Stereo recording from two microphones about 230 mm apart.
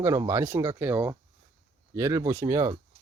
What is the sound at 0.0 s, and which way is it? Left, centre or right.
Speech, centre.